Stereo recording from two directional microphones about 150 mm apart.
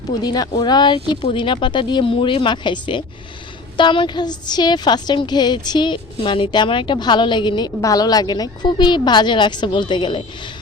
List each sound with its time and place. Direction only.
0.2 s a woman's voice: 25° left (ahead or behind)